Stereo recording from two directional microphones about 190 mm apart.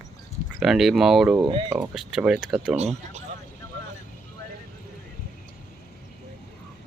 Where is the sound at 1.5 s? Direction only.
30° right (ahead or behind).